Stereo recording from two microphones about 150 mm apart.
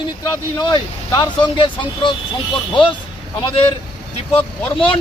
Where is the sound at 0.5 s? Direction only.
25° left (ahead or behind).